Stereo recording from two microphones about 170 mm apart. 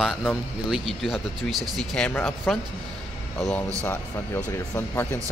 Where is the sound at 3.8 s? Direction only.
10° left (ahead or behind).